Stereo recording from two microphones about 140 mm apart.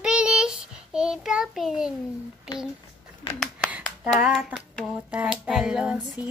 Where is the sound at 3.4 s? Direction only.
10° right (ahead or behind).